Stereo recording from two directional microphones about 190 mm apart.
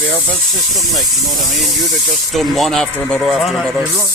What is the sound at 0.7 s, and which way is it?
Speech, centre (ahead or behind).